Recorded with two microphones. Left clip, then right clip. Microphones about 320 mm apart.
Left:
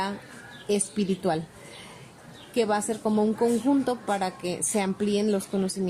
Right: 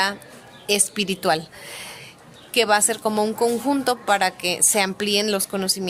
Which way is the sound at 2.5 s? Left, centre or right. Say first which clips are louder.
Right 7 dB; right.